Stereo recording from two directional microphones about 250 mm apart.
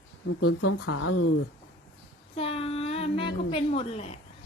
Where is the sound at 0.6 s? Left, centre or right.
Left.